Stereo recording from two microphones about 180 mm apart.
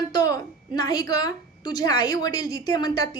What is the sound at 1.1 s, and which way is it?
A woman's voice, 25° left (ahead or behind).